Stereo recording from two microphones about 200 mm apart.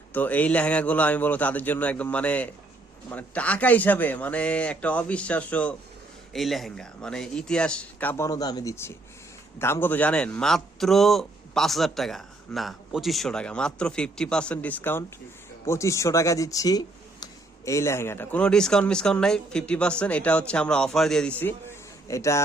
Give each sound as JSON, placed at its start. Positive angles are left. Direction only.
{"t": 0.1, "sound": "a man's voice", "side_deg": 10}